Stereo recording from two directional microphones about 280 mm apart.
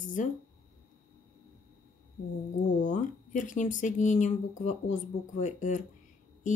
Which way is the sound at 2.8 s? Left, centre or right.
Left.